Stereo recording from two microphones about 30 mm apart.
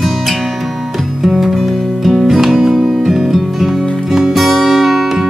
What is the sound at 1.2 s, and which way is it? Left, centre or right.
Music, centre.